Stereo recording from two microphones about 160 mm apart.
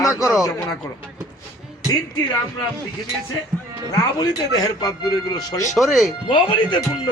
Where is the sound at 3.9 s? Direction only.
25° left (ahead or behind).